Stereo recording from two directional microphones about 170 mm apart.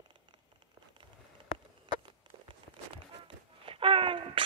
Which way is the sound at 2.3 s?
25° right (ahead or behind).